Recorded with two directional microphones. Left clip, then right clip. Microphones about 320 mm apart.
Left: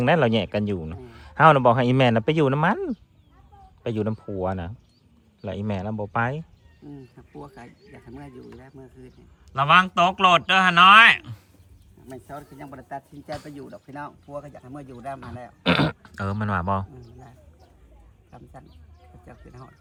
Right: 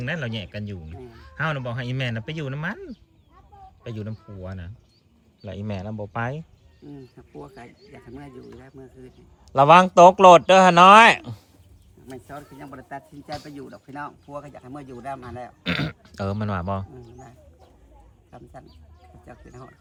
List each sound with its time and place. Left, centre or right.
0.0 s a man's voice: centre
12.0 s speech: centre